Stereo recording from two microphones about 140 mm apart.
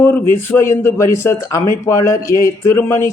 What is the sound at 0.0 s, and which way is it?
A man's voice, 15° left (ahead or behind).